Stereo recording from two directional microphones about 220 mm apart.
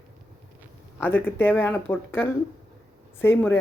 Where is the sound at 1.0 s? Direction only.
10° left (ahead or behind).